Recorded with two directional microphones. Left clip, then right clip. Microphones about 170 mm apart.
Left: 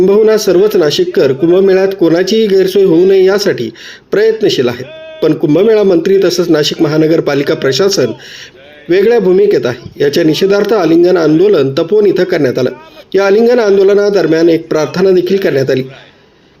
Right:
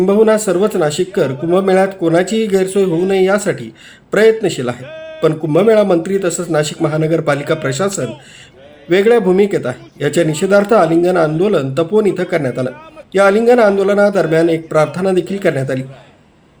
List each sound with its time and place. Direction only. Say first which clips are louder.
0.0 s speech: left 4 dB; 30° left (ahead or behind)